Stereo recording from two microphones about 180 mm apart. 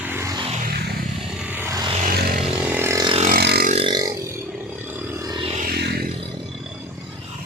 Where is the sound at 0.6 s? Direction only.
60° right (ahead or behind).